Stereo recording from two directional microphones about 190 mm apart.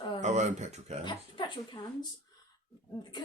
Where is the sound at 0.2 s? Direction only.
40° right (ahead or behind).